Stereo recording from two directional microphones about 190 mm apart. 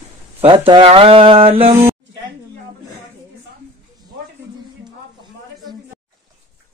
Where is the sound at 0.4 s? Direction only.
30° right (ahead or behind).